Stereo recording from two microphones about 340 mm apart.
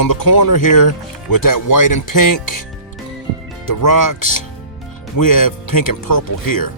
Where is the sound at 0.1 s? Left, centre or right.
Left.